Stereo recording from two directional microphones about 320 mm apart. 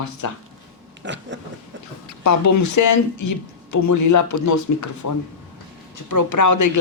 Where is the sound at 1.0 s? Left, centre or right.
Right.